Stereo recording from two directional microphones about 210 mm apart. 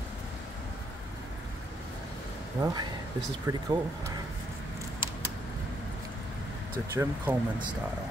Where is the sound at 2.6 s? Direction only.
20° right (ahead or behind).